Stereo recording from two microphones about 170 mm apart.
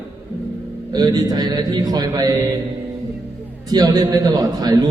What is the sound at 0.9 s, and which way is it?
A man's voice, 20° right (ahead or behind).